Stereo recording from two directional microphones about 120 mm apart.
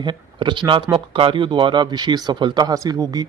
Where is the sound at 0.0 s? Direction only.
40° right (ahead or behind).